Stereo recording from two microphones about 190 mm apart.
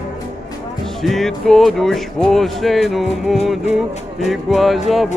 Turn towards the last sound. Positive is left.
turn(degrees=0)  # may be behind; listen again after turning